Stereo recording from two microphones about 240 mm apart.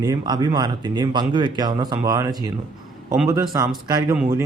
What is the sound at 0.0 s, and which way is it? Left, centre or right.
Speech, centre.